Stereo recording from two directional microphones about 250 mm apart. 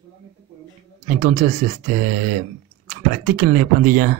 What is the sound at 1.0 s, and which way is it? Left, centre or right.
Speech, right.